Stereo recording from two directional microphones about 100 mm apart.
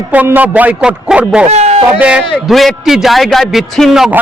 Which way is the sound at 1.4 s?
90° right.